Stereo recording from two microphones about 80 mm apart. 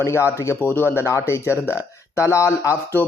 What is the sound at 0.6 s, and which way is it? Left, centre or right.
Speech, left.